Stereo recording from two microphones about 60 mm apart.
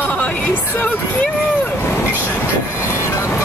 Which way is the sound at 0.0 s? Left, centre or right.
Left.